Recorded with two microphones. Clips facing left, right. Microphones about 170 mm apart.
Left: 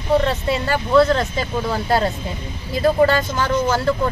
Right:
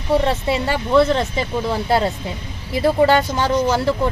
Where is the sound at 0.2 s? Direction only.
25° right (ahead or behind).